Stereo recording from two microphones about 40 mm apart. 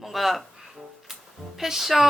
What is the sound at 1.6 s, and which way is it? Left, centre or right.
Music, centre.